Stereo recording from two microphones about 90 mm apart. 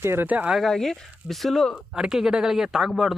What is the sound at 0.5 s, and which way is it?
Speech, 5° left (ahead or behind).